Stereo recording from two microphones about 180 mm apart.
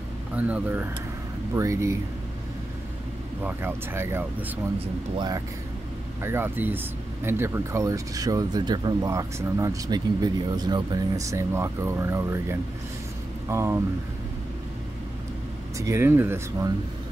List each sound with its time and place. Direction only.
0.4 s speech: 10° right (ahead or behind)
3.4 s speech: 15° right (ahead or behind)
5.1 s speech: 25° right (ahead or behind)
6.2 s speech: 10° right (ahead or behind)
15.8 s speech: 15° right (ahead or behind)